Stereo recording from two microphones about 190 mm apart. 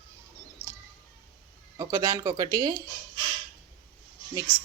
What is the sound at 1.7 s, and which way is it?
Speech, 20° right (ahead or behind).